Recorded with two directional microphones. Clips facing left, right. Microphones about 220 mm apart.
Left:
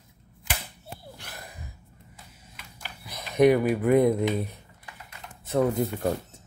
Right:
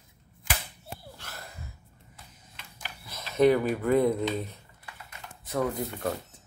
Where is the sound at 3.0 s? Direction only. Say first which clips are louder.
Left 2 dB; 15° left (ahead or behind).